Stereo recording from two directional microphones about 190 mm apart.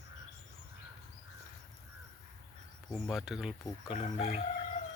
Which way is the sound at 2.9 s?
Centre (ahead or behind).